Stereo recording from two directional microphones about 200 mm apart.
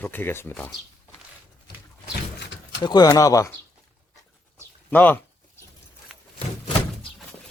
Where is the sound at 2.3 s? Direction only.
60° left (ahead or behind).